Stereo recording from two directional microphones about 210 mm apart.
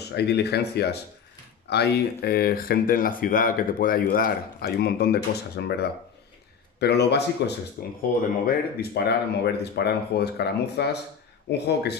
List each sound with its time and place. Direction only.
0.0 s speech: 50° left (ahead or behind)